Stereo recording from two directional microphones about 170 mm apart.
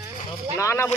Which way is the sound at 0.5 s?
15° left (ahead or behind).